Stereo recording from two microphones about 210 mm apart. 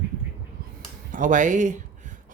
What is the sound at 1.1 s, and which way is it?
Speech, 40° right (ahead or behind).